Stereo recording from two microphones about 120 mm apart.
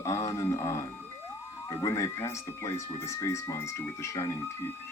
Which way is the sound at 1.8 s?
25° left (ahead or behind).